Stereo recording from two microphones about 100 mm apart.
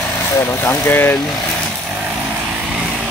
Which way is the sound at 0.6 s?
20° left (ahead or behind).